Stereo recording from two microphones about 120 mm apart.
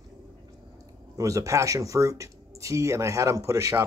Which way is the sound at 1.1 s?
30° right (ahead or behind).